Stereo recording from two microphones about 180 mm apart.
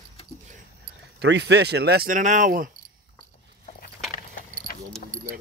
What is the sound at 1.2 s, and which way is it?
Speech, 75° right (ahead or behind).